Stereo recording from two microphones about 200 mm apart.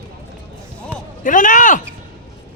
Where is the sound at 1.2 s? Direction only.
40° left (ahead or behind).